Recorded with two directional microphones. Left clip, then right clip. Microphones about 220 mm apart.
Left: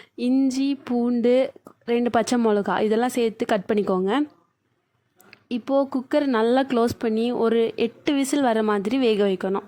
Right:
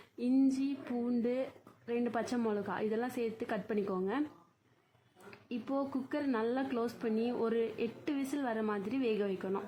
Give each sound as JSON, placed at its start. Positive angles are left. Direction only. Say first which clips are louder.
{"t": 0.2, "sound": "speech", "louder": "left 9 dB", "side_deg": 40}
{"t": 5.3, "sound": "speech", "louder": "left 15 dB", "side_deg": 45}